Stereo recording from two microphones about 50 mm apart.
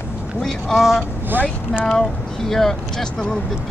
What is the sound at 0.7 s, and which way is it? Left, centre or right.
Speech, centre.